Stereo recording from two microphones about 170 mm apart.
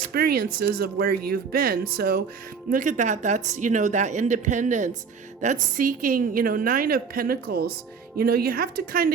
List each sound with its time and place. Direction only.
0.1 s a woman's voice: 65° right (ahead or behind)
2.6 s a woman's voice: 50° right (ahead or behind)